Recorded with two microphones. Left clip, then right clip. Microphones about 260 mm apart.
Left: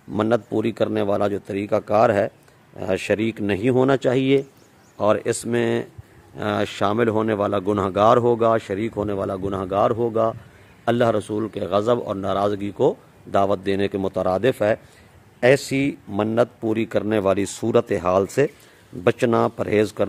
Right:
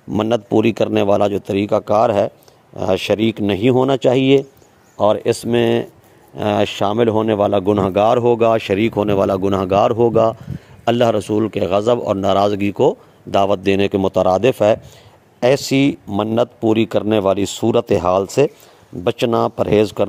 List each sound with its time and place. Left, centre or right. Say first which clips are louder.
0.1 s speech: right 4 dB; right